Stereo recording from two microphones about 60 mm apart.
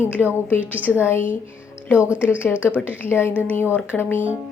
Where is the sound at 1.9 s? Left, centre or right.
Right.